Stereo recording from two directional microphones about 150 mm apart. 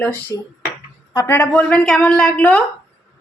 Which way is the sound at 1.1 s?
15° left (ahead or behind).